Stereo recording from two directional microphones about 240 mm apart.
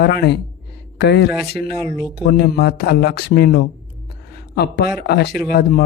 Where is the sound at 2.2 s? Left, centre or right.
Left.